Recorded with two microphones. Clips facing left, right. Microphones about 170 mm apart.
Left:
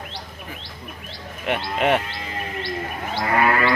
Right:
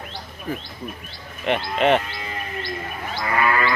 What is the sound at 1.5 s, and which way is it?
Speech, 10° left (ahead or behind).